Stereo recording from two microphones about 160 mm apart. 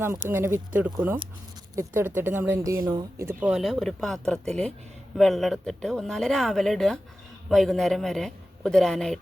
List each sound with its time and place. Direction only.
0.0 s speech: 15° right (ahead or behind)
3.5 s speech: centre (ahead or behind)